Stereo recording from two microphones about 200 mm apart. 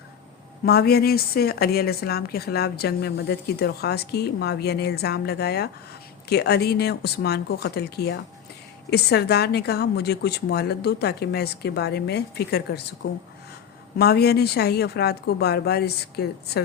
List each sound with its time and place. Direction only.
0.6 s a woman's voice: 50° left (ahead or behind)
14.0 s a woman's voice: 55° left (ahead or behind)